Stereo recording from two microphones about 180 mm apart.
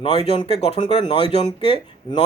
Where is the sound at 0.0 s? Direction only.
30° left (ahead or behind).